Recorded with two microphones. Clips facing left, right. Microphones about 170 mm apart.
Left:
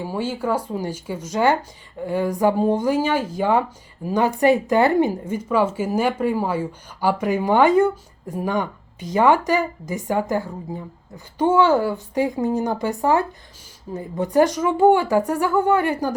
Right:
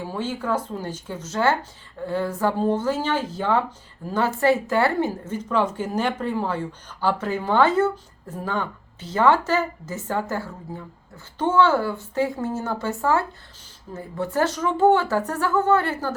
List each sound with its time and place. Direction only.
0.0 s a woman's voice: 10° left (ahead or behind)